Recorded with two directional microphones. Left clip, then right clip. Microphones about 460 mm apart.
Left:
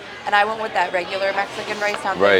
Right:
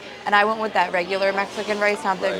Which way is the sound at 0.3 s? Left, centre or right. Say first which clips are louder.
Even; right.